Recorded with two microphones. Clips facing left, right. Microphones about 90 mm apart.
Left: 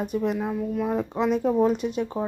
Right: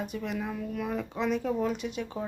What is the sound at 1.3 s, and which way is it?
Speech, 35° left (ahead or behind).